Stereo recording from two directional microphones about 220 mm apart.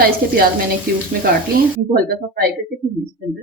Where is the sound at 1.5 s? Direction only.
40° right (ahead or behind).